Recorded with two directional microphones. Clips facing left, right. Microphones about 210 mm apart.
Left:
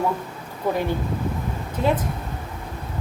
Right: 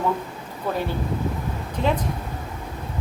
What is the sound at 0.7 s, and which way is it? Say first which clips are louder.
Speech: left 3 dB; 15° left (ahead or behind).